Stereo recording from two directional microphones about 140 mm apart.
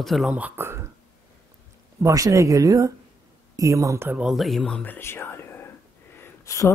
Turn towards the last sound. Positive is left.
turn(degrees=20)  # may be behind; listen again after turning